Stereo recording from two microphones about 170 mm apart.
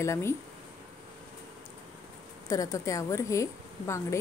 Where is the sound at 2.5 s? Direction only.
20° left (ahead or behind).